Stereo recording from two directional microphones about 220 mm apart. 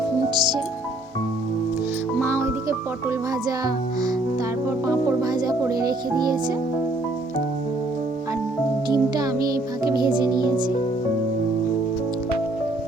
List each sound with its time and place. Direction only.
0.3 s music: 20° right (ahead or behind)
2.2 s music: 10° right (ahead or behind)
4.9 s speech: 15° right (ahead or behind)
8.9 s speech: 15° right (ahead or behind)
9.9 s music: 20° right (ahead or behind)